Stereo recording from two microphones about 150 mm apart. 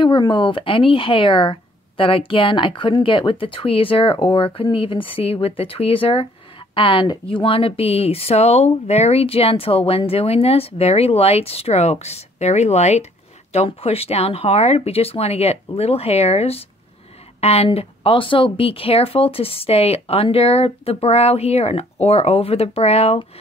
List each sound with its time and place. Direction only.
0.0 s speech: 35° left (ahead or behind)